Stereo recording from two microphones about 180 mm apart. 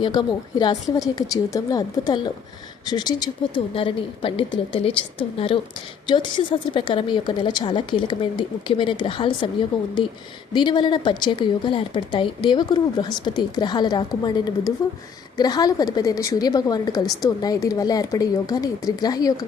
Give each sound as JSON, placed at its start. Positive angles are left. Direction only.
{"t": 0.0, "sound": "a woman's voice", "side_deg": 25}
{"t": 6.7, "sound": "a woman's voice", "side_deg": 25}